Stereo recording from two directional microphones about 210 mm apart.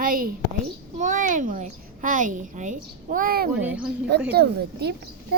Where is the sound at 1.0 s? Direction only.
35° right (ahead or behind).